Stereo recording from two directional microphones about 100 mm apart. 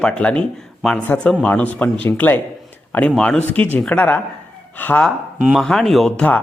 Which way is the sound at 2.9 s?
15° left (ahead or behind).